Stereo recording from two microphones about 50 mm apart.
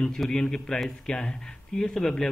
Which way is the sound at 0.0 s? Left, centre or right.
Centre.